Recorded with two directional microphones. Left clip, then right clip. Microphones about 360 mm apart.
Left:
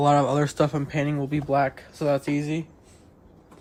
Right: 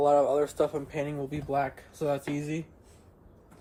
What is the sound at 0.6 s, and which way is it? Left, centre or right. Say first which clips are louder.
Speech: left 4 dB; left.